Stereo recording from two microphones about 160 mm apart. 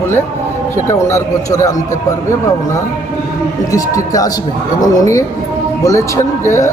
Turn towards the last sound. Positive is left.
turn(degrees=15)  # may be behind; listen again after turning